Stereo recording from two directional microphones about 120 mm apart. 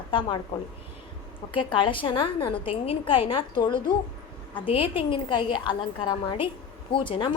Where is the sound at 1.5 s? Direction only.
45° left (ahead or behind).